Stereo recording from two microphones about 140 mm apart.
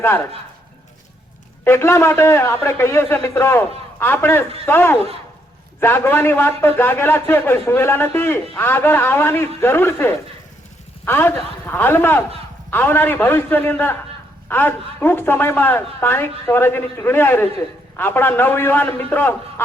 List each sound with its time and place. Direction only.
1.6 s a man's voice: 20° left (ahead or behind)